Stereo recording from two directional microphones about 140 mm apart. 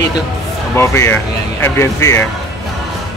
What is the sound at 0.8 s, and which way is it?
Speech, 20° left (ahead or behind).